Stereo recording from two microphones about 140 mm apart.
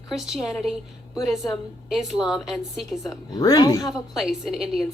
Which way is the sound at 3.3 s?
30° left (ahead or behind).